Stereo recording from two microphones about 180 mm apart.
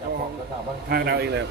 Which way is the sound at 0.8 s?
60° right (ahead or behind).